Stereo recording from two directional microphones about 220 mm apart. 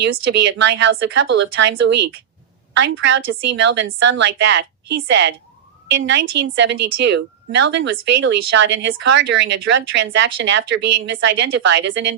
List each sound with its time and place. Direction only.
0.0 s a woman's voice: 50° right (ahead or behind)